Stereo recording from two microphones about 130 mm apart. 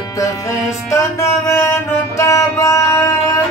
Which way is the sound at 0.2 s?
25° left (ahead or behind).